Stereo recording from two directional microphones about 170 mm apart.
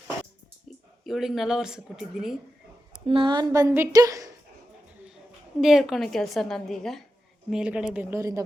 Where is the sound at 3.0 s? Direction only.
30° right (ahead or behind).